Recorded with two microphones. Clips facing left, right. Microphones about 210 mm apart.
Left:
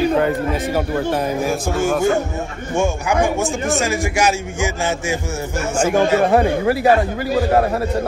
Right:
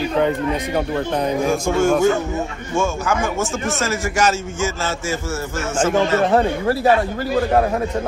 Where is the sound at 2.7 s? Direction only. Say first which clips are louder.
Left 2 dB; 15° left (ahead or behind).